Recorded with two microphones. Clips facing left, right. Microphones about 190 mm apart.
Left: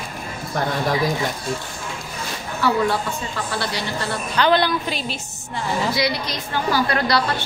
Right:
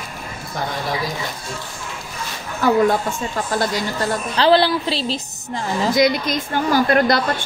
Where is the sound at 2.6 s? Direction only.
45° right (ahead or behind).